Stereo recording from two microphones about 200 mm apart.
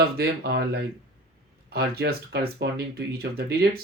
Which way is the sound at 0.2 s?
55° right (ahead or behind).